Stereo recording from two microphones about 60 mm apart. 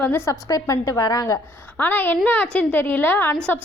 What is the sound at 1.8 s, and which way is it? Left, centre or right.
A woman's voice, left.